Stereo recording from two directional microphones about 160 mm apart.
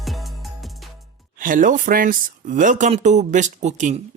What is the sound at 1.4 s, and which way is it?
Speech, 55° right (ahead or behind).